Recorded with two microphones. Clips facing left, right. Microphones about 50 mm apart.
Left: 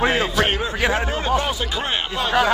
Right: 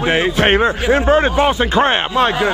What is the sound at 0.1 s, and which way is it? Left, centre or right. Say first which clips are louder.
Speech: right 6 dB; right.